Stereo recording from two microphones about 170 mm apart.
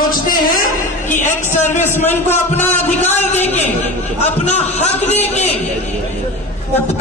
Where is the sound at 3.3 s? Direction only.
40° left (ahead or behind).